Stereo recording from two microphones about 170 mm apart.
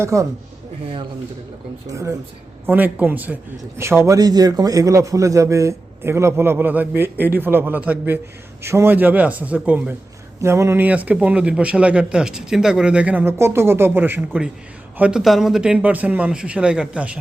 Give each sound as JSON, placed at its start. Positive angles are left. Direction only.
{"t": 0.0, "sound": "a man's voice", "side_deg": -15}
{"t": 1.9, "sound": "a man's voice", "side_deg": -15}